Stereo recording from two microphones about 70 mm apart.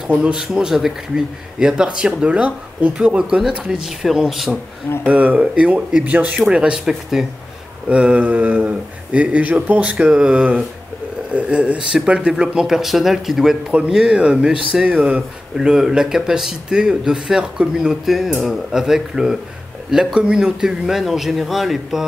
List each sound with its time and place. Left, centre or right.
0.0 s speech: centre
5.0 s speech: right; by 7.2 s centre
7.9 s speech: centre
15.5 s speech: centre